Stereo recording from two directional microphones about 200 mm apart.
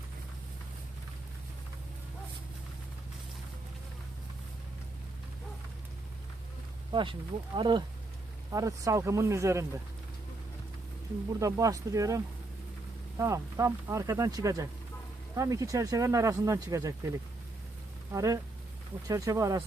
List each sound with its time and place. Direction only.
6.9 s speech: 25° right (ahead or behind)
11.3 s speech: 15° right (ahead or behind)
18.1 s speech: 15° right (ahead or behind)